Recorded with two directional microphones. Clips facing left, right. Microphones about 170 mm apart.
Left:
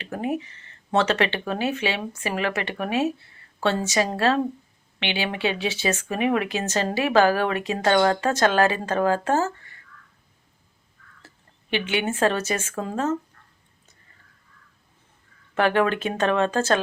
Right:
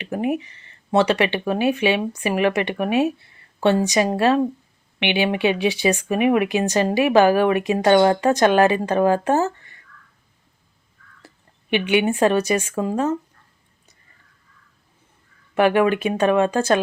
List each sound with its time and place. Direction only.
0.0 s speech: 15° right (ahead or behind)
11.7 s speech: 15° right (ahead or behind)
15.5 s speech: 15° right (ahead or behind)